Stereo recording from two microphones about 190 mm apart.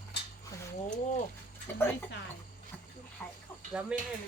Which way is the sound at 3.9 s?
5° right (ahead or behind).